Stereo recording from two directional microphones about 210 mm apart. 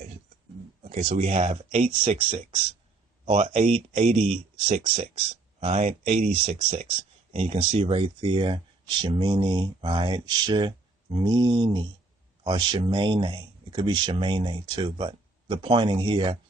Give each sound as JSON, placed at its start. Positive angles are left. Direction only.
{"t": 0.8, "sound": "speech", "side_deg": -30}